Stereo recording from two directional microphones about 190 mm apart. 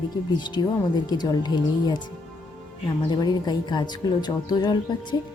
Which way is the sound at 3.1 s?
20° left (ahead or behind).